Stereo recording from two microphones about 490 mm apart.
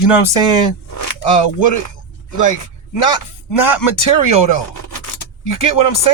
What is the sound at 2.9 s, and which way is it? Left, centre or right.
Speech, left.